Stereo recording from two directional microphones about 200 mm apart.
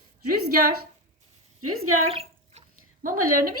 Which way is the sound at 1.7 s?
90° right.